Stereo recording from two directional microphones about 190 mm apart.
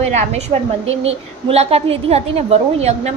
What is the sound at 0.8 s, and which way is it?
A woman's voice, 30° right (ahead or behind).